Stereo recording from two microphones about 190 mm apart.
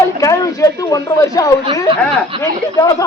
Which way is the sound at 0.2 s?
15° left (ahead or behind).